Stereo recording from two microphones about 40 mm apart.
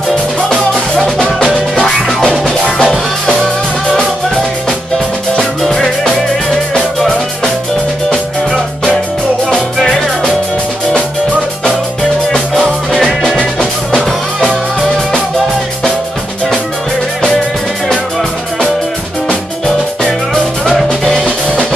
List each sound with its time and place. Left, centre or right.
1.9 s music: centre
5.7 s music: centre
9.8 s music: centre
12.5 s music: centre
13.4 s music: left
21.0 s drum kit: centre